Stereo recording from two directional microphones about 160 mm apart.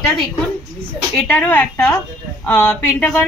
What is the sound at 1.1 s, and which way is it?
A woman's voice, 5° left (ahead or behind).